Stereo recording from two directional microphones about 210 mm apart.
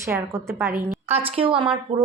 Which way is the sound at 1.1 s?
30° right (ahead or behind).